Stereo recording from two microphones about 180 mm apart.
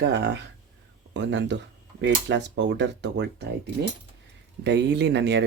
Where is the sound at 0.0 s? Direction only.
70° right (ahead or behind).